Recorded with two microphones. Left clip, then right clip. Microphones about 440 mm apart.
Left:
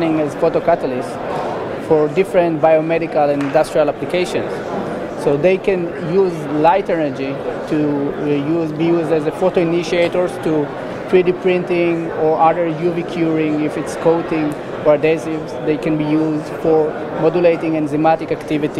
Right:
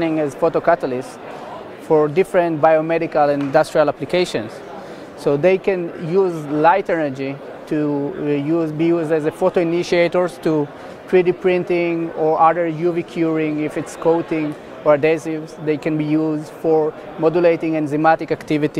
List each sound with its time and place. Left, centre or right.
0.0 s speech: right
8.3 s speech: right